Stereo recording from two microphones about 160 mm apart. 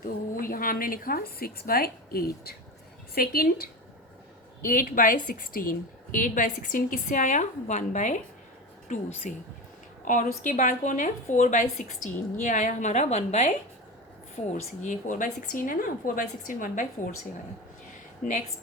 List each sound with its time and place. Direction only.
0.0 s a woman's voice: 60° left (ahead or behind)
4.6 s a woman's voice: 60° left (ahead or behind); by 13.5 s 40° left (ahead or behind)
14.5 s a woman's voice: 50° left (ahead or behind)